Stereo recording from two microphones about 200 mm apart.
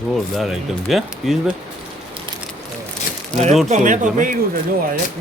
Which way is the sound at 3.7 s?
40° right (ahead or behind).